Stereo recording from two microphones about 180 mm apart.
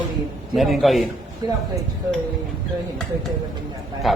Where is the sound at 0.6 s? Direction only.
Centre (ahead or behind).